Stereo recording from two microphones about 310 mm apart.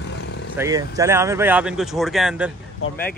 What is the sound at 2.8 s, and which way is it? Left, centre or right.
Speech, left.